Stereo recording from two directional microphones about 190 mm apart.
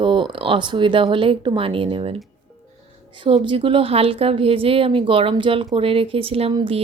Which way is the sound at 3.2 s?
25° right (ahead or behind).